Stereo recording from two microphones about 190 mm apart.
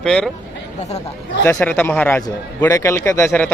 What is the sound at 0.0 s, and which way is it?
Speech, 5° left (ahead or behind).